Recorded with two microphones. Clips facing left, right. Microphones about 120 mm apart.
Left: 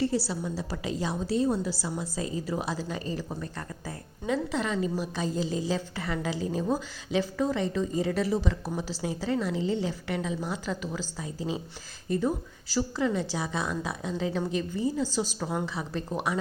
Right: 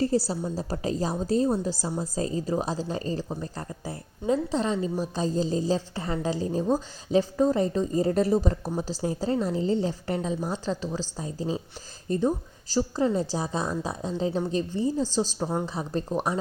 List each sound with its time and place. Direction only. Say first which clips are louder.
0.3 s a woman's voice: right 3 dB; 35° right (ahead or behind)